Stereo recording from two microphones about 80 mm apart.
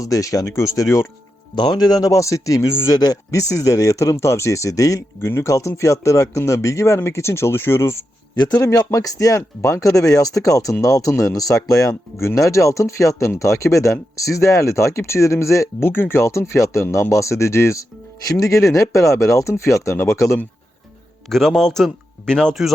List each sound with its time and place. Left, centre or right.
0.0 s speech: left
1.5 s speech: left
5.2 s speech: left
8.4 s speech: left
8.6 s speech: left
21.2 s speech: centre